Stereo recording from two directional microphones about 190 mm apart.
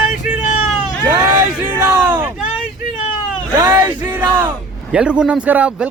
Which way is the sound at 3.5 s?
20° right (ahead or behind).